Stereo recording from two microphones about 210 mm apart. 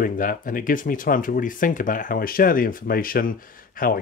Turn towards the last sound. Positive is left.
turn(degrees=45)  # may be behind; listen again after turning